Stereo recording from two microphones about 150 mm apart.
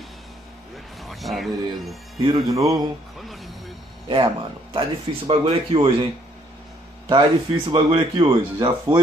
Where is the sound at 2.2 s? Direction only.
25° right (ahead or behind).